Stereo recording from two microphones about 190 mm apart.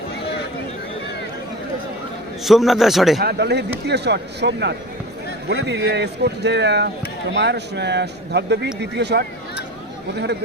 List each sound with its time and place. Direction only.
2.4 s a man's voice: centre (ahead or behind)
3.2 s speech: 60° right (ahead or behind)